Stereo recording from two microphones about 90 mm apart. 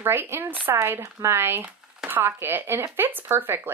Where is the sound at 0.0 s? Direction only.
25° right (ahead or behind).